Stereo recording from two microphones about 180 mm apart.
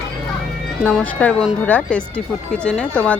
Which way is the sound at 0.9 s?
10° left (ahead or behind).